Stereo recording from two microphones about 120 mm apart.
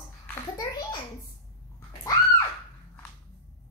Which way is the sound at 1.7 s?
30° left (ahead or behind).